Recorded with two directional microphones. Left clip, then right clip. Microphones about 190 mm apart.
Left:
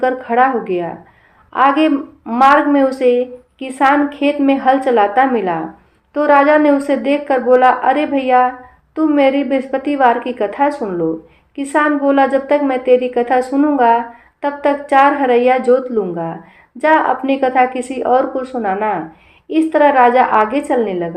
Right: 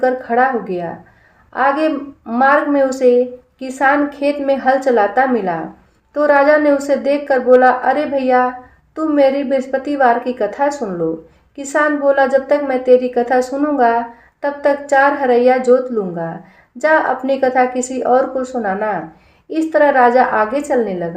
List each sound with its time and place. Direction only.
0.0 s a woman's voice: 25° left (ahead or behind)